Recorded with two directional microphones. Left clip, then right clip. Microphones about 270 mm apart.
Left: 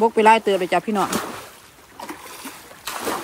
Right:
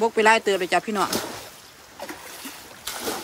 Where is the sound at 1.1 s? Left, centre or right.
Left.